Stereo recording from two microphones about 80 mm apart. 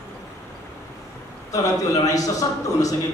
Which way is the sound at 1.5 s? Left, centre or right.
Left.